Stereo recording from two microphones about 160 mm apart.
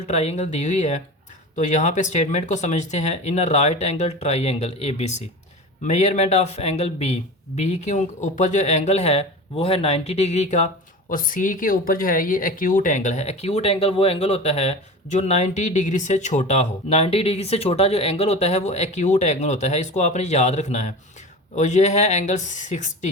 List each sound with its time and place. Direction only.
0.1 s speech: 45° left (ahead or behind)
11.1 s speech: 60° left (ahead or behind)